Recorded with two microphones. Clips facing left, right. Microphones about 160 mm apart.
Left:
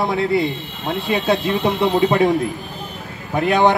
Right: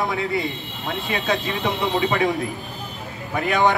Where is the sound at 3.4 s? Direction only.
20° left (ahead or behind).